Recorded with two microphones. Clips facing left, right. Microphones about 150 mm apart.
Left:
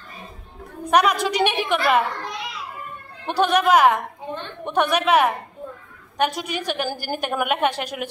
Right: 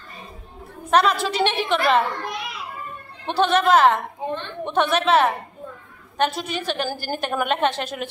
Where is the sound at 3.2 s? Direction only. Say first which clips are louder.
Even; 10° left (ahead or behind).